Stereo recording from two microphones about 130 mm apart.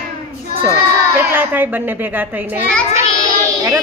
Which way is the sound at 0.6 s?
15° right (ahead or behind).